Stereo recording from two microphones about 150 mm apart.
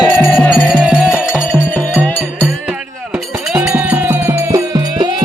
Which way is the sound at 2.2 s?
10° right (ahead or behind).